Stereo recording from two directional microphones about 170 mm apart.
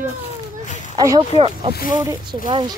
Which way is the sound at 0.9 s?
25° right (ahead or behind).